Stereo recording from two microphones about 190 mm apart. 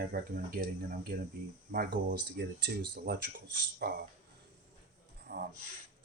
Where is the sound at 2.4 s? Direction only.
55° right (ahead or behind).